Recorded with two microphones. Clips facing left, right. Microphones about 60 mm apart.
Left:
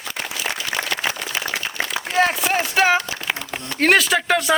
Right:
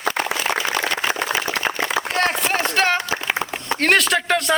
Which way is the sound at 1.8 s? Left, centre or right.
Right.